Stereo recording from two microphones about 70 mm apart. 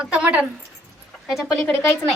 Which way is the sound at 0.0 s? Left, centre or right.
Centre.